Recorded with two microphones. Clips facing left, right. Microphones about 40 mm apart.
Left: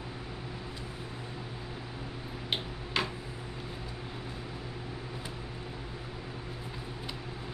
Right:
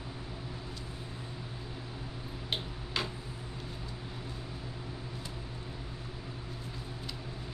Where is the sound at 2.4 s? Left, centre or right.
Centre.